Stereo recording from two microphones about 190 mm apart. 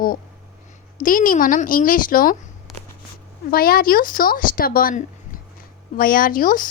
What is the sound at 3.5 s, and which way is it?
A woman's voice, 50° left (ahead or behind).